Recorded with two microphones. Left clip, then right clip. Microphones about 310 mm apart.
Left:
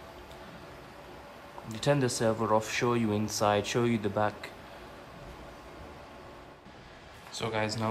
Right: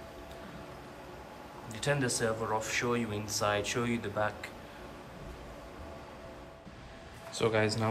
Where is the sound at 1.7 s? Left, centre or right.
Centre.